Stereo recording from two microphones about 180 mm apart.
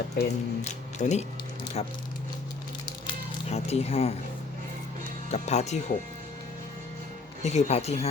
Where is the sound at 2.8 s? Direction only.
30° left (ahead or behind).